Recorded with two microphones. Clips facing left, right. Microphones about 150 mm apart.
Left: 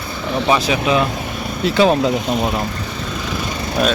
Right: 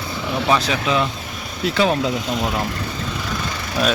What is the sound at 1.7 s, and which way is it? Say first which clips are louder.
Speech: left 5 dB; 40° left (ahead or behind).